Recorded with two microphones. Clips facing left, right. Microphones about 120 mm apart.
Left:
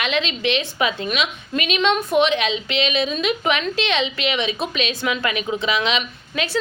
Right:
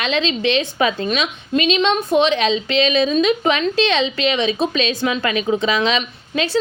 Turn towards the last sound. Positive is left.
turn(degrees=-30)  # may be behind; listen again after turning